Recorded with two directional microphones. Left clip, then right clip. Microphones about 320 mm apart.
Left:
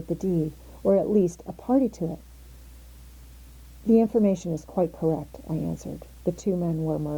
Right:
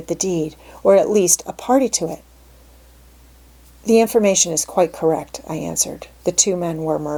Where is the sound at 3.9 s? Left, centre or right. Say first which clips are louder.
Right 8 dB; centre.